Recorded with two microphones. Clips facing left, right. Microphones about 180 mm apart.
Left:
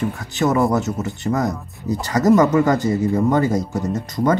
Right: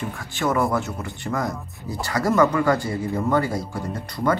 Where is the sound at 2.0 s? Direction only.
20° left (ahead or behind).